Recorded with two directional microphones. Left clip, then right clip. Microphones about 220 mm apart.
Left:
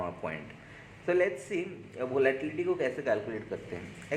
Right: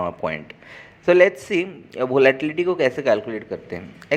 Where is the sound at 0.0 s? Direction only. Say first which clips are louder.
Right 11 dB; 30° right (ahead or behind).